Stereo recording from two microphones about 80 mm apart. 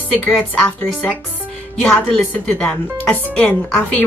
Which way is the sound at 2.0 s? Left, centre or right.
Centre.